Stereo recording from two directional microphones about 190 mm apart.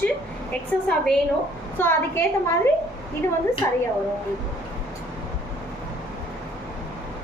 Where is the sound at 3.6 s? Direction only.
15° left (ahead or behind).